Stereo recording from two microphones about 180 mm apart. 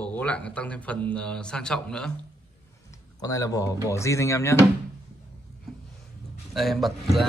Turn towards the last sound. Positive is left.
turn(degrees=0)  # may be behind; listen again after turning